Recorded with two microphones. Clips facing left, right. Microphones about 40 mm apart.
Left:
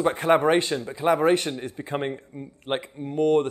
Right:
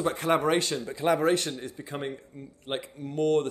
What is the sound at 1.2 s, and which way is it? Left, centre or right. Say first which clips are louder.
A man's voice: left 4 dB; left.